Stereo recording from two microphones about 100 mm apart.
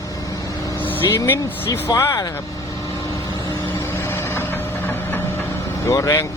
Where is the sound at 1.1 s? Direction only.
25° left (ahead or behind).